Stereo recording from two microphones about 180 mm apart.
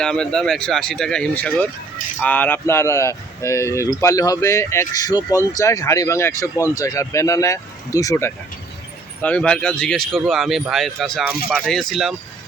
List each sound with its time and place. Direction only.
0.0 s speech: 5° left (ahead or behind)